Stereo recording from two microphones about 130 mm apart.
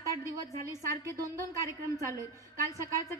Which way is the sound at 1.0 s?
25° right (ahead or behind).